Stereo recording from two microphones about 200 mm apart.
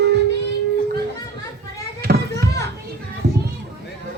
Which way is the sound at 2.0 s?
55° right (ahead or behind).